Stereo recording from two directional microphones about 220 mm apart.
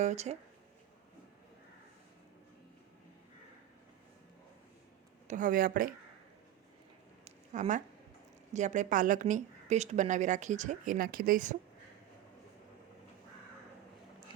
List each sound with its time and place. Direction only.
0.0 s a woman's voice: 30° right (ahead or behind)
5.3 s a woman's voice: 35° right (ahead or behind)
7.3 s a sound: 30° right (ahead or behind)
8.5 s a woman's voice: 35° right (ahead or behind)